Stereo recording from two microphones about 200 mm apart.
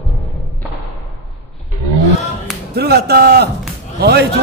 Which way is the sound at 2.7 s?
55° right (ahead or behind).